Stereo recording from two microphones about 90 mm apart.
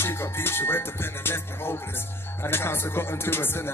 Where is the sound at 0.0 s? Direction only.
25° left (ahead or behind).